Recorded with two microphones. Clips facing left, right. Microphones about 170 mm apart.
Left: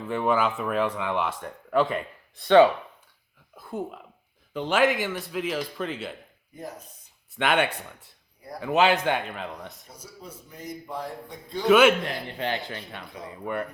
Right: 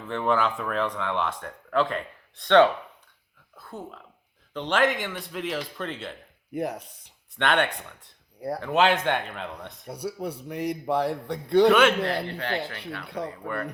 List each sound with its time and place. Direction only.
0.0 s speech: 10° left (ahead or behind)
3.5 s a sound: 10° left (ahead or behind)
4.5 s speech: 5° left (ahead or behind)
6.5 s a man's voice: 70° right (ahead or behind)
7.3 s speech: 5° left (ahead or behind)
9.8 s a man's voice: 65° right (ahead or behind)
11.7 s speech: 10° left (ahead or behind)
13.1 s a man's voice: 70° right (ahead or behind)